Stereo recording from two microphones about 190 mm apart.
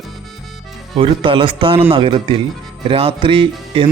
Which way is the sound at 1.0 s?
30° right (ahead or behind).